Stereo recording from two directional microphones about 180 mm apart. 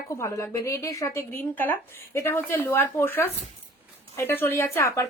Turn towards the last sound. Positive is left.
turn(degrees=15)  # may be behind; listen again after turning